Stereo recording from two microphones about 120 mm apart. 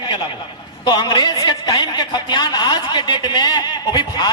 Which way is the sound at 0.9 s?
35° left (ahead or behind).